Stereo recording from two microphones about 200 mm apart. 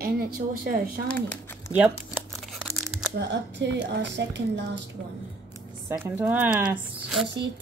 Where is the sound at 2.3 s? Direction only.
Centre (ahead or behind).